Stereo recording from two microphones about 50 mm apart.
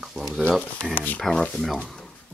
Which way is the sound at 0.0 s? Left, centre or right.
Centre.